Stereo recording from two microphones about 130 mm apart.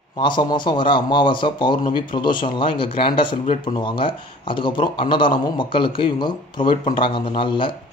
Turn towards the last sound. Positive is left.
turn(degrees=40)  # may be behind; listen again after turning